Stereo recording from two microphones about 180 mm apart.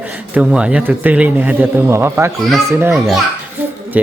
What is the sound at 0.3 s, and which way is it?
Speech, 5° right (ahead or behind).